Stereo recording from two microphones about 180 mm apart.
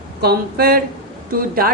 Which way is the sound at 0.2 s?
60° right (ahead or behind).